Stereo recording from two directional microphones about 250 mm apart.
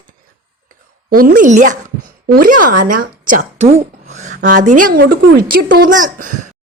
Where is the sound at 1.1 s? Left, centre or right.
Right.